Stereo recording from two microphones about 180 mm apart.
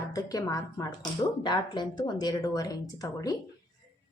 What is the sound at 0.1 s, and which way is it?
Speech, 20° left (ahead or behind).